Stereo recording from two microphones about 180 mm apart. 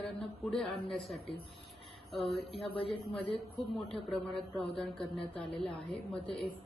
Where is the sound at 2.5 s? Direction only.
30° left (ahead or behind).